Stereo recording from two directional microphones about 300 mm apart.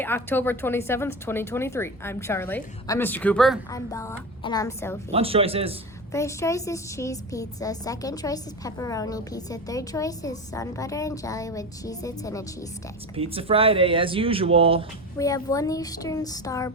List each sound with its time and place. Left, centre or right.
0.0 s a woman's voice: centre
5.1 s speech: centre
6.1 s a woman's voice: centre
13.1 s speech: centre
15.2 s a woman's voice: centre